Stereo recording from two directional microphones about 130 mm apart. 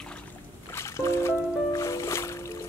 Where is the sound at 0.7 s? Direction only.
20° left (ahead or behind).